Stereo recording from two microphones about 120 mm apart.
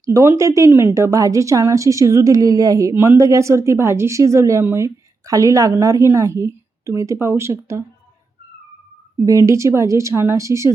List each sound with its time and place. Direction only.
0.0 s a woman's voice: 25° right (ahead or behind)
9.5 s a woman's voice: 25° right (ahead or behind)